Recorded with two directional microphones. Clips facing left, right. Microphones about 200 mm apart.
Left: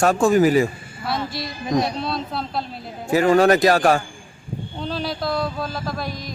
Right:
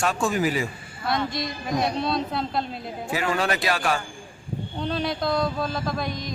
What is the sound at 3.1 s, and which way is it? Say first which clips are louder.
Speech: left 11 dB; 45° left (ahead or behind).